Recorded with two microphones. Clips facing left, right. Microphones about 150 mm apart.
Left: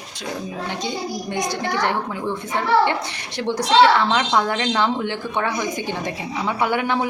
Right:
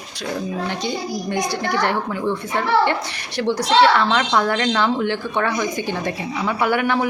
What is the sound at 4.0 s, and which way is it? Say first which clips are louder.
A woman's voice: right 1 dB; 20° left (ahead or behind).